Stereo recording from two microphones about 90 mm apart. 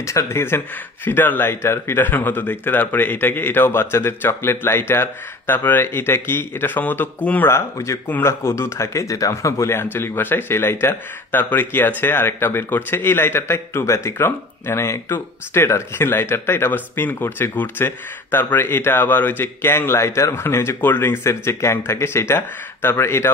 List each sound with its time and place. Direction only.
0.0 s speech: 35° left (ahead or behind)